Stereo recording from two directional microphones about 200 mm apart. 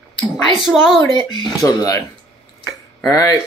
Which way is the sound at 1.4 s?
20° left (ahead or behind).